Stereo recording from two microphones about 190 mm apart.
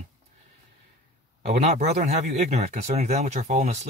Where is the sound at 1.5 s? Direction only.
35° right (ahead or behind).